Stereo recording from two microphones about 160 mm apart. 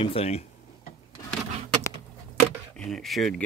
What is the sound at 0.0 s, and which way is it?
Speech, 35° left (ahead or behind).